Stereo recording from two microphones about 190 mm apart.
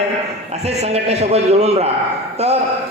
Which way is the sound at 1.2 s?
35° right (ahead or behind).